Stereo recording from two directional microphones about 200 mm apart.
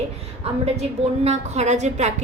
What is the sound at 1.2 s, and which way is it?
Speech, 35° right (ahead or behind).